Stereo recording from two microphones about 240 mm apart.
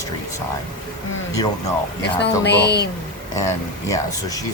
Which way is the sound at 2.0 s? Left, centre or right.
Left.